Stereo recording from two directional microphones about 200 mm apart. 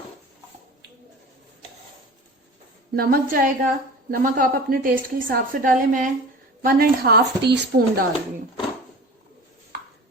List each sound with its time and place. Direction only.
2.9 s a woman's voice: 50° right (ahead or behind)